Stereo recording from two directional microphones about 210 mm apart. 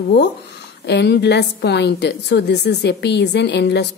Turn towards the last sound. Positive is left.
turn(degrees=55)  # may be behind; listen again after turning